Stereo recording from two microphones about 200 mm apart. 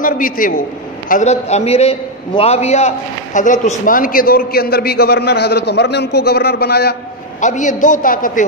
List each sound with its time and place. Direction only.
0.0 s a man's voice: 45° left (ahead or behind)
7.3 s a man's voice: 40° left (ahead or behind)